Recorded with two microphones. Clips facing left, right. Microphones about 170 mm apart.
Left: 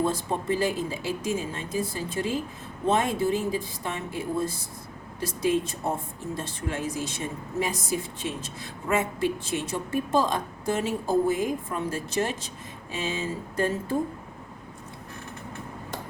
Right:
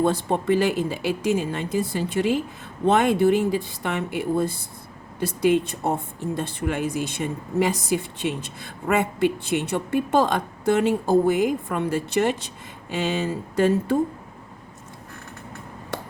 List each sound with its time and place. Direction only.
0.0 s a woman's voice: 70° right (ahead or behind)
7.6 s a woman's voice: 70° right (ahead or behind)